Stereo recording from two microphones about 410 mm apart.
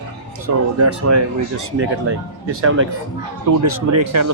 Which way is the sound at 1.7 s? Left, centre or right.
Right.